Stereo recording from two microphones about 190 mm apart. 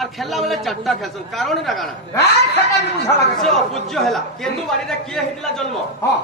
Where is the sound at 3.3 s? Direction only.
Centre (ahead or behind).